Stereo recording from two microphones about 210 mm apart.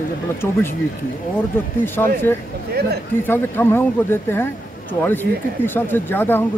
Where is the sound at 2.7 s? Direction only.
50° right (ahead or behind).